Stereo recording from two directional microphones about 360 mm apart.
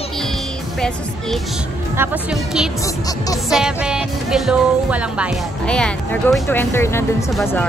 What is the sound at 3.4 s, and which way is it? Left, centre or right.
Speech, centre.